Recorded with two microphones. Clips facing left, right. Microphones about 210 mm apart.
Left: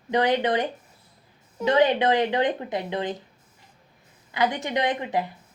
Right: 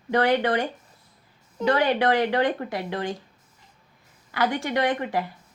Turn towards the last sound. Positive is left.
turn(degrees=20)  # may be behind; listen again after turning